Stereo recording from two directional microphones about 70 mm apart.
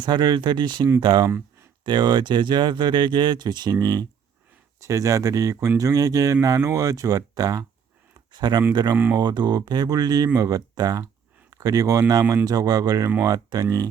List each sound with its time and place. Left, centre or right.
0.0 s speech: right
4.8 s speech: right
8.3 s speech: right
11.5 s speech: right